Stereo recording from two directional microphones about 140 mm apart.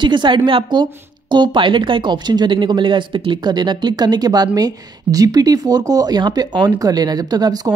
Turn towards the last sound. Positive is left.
turn(degrees=-30)  # may be behind; listen again after turning